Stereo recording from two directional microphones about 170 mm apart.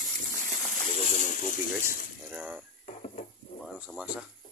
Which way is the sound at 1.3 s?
55° left (ahead or behind).